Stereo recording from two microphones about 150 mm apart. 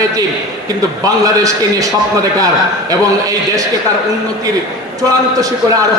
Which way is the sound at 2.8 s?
25° right (ahead or behind).